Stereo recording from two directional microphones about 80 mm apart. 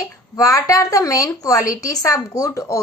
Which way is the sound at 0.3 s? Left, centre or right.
Left.